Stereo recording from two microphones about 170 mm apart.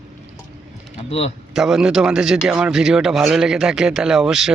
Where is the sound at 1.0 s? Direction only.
35° left (ahead or behind).